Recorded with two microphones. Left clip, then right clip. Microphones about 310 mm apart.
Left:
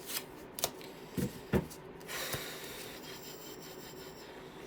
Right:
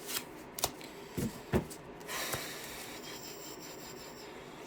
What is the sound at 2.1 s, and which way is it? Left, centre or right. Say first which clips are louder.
Snort: right 1 dB; centre.